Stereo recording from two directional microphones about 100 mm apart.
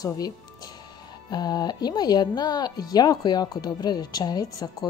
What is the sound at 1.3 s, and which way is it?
A woman's voice, 40° left (ahead or behind).